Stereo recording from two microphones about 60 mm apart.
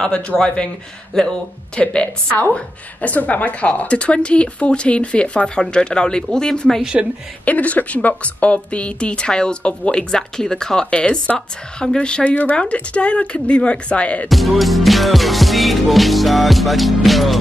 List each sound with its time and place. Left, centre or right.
0.3 s music: centre
1.1 s speech: centre
1.8 s a woman's voice: left
6.8 s speech: centre
7.4 s a woman's voice: left
14.3 s music: centre